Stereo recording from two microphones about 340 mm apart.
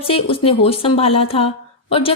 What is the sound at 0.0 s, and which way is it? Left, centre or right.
A woman's voice, centre.